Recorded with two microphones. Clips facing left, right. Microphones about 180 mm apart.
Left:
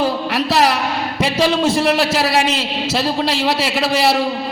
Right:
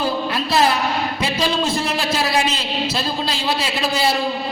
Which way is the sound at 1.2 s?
80° left.